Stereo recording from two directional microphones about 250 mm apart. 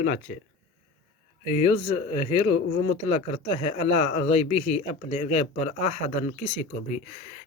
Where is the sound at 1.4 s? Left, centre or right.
Left.